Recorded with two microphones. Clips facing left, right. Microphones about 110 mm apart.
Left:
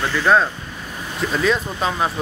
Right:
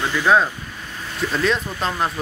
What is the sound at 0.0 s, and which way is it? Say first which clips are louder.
Speech: left 1 dB; 15° right (ahead or behind).